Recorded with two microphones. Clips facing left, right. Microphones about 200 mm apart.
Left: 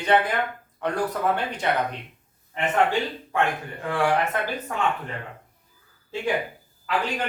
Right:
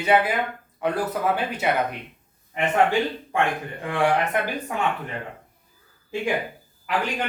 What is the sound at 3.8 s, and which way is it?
Speech, 20° right (ahead or behind).